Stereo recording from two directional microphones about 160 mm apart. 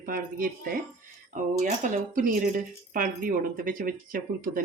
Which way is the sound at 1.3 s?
50° right (ahead or behind).